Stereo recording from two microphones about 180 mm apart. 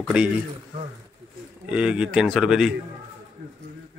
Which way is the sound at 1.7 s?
5° right (ahead or behind).